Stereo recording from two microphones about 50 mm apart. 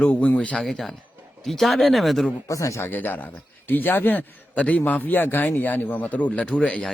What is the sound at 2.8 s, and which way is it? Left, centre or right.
A man's voice, left.